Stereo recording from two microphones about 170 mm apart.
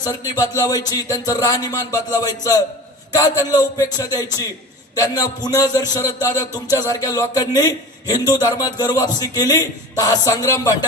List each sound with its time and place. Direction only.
0.3 s a man's voice: 20° left (ahead or behind)